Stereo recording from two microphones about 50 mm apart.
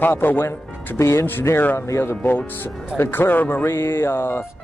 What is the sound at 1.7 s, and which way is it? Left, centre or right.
Speech, left.